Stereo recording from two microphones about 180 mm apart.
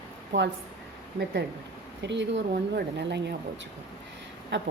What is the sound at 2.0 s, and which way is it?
Speech, 80° right.